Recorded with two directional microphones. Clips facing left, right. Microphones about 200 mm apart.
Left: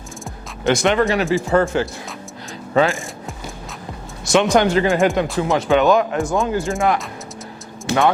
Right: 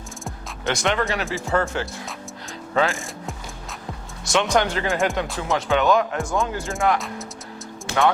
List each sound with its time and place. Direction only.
0.8 s speech: 10° left (ahead or behind)
4.3 s speech: 10° left (ahead or behind)